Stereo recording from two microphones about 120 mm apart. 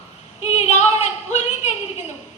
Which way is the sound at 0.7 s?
75° left (ahead or behind).